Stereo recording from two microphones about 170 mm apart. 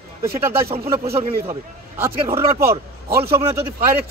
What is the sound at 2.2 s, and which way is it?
Speech, 35° right (ahead or behind).